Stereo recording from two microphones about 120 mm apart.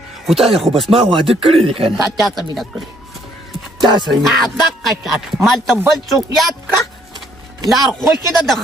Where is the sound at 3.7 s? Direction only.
40° right (ahead or behind).